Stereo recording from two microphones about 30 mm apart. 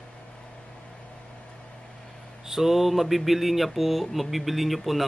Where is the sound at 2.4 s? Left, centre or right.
Centre.